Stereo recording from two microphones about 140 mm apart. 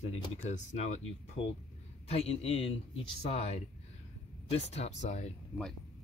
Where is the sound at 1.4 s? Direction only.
45° left (ahead or behind).